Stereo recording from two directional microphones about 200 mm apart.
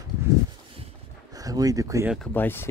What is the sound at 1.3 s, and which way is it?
Speech, 15° right (ahead or behind).